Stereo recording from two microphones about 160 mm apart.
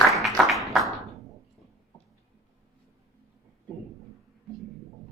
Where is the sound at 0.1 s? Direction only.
Centre (ahead or behind).